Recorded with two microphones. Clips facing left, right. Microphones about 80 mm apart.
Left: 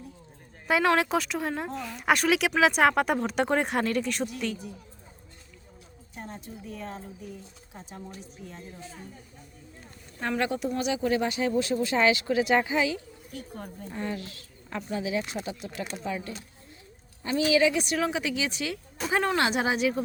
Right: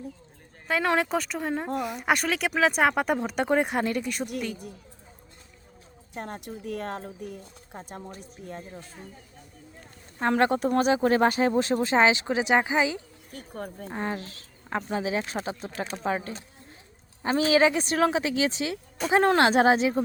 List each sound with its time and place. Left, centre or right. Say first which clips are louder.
0.9 s speech: right 1 dB; centre
6.1 s a woman's voice: right 5 dB; right
10.2 s a woman's voice: right 5 dB; right
13.3 s a woman's voice: right 3 dB; right
19.0 s speech: right 4 dB; centre
19.4 s speech: right 6 dB; right